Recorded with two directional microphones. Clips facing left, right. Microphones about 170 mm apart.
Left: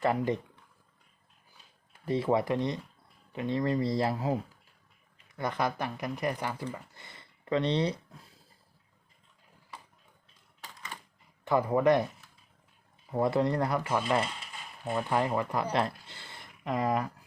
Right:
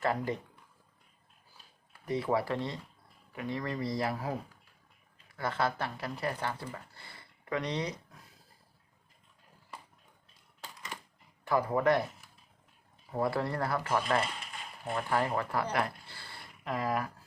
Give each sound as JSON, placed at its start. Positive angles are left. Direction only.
{"t": 0.0, "sound": "speech", "side_deg": 20}
{"t": 2.0, "sound": "speech", "side_deg": 25}
{"t": 5.4, "sound": "speech", "side_deg": 15}
{"t": 6.9, "sound": "a sound", "side_deg": 20}
{"t": 11.4, "sound": "speech", "side_deg": 20}
{"t": 13.1, "sound": "speech", "side_deg": 20}
{"t": 15.5, "sound": "a sound", "side_deg": 20}